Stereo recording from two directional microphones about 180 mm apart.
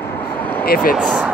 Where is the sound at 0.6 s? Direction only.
55° left (ahead or behind).